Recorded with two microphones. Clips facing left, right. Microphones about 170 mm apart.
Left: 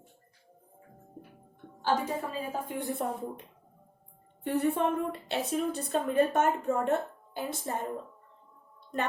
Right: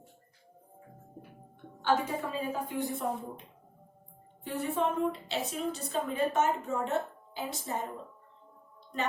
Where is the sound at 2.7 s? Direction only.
55° left (ahead or behind).